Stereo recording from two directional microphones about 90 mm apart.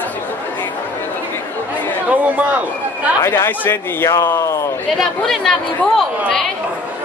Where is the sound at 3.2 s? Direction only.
30° left (ahead or behind).